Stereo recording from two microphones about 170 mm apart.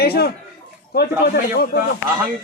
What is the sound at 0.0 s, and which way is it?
A man's voice, 65° left (ahead or behind).